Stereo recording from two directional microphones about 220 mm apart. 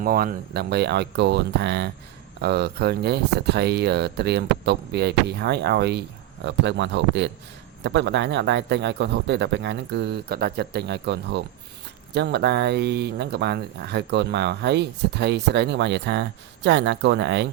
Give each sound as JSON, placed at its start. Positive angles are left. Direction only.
{"t": 0.0, "sound": "speech", "side_deg": -40}